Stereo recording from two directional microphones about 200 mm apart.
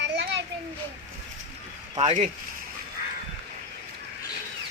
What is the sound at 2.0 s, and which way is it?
Speech, 35° right (ahead or behind).